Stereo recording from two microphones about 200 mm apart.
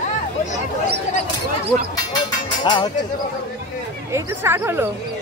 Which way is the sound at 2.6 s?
20° left (ahead or behind).